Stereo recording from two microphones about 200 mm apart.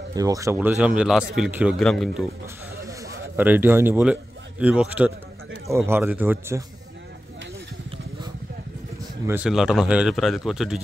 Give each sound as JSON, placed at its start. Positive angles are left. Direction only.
{"t": 0.1, "sound": "a man's voice", "side_deg": -15}
{"t": 2.8, "sound": "a sound", "side_deg": -15}
{"t": 3.3, "sound": "a man's voice", "side_deg": -10}
{"t": 9.2, "sound": "speech", "side_deg": -10}